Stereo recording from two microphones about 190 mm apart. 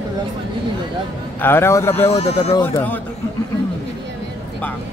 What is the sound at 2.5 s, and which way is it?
Speech, 10° left (ahead or behind).